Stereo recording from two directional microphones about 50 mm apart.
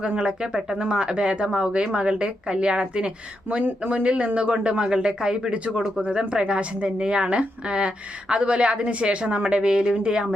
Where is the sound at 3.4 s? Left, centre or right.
Right.